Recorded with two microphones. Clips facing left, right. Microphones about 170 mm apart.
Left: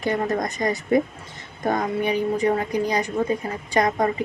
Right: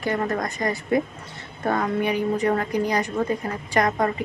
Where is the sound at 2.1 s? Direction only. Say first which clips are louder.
Left 3 dB; 20° left (ahead or behind).